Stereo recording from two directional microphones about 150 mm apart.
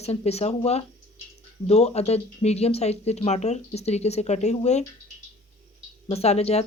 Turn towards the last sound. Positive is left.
turn(degrees=45)  # may be behind; listen again after turning